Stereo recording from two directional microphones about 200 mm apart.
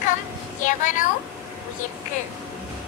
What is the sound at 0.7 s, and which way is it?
Speech, 40° left (ahead or behind).